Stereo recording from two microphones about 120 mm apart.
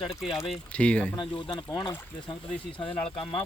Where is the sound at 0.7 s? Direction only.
10° left (ahead or behind).